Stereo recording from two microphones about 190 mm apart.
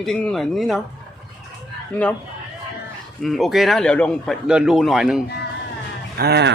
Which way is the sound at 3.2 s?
Centre (ahead or behind).